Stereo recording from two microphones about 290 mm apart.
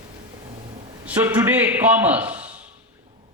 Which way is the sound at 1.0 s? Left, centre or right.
Centre.